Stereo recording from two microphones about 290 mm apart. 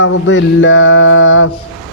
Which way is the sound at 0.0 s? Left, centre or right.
Left.